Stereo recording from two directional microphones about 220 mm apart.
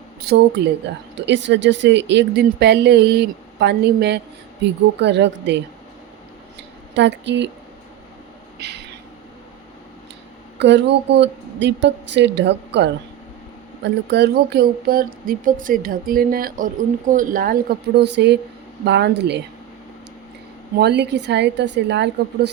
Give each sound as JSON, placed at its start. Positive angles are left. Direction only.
{"t": 0.3, "sound": "a woman's voice", "side_deg": -45}
{"t": 6.9, "sound": "a woman's voice", "side_deg": -55}
{"t": 8.5, "sound": "a sound", "side_deg": -50}
{"t": 10.6, "sound": "a woman's voice", "side_deg": -50}
{"t": 20.7, "sound": "a woman's voice", "side_deg": -50}